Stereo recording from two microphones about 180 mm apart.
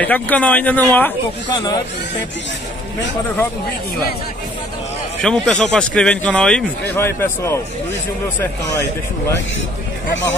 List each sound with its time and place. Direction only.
0.0 s speech: 10° left (ahead or behind)
1.5 s speech: 20° left (ahead or behind)
5.2 s speech: centre (ahead or behind)